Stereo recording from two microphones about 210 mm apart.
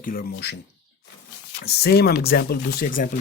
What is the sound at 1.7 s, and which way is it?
Speech, 50° left (ahead or behind).